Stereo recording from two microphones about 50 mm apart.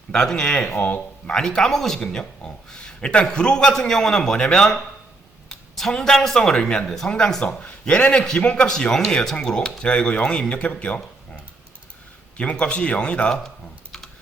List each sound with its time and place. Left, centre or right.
0.1 s a man's voice: centre
7.4 s a man's voice: left
12.4 s speech: left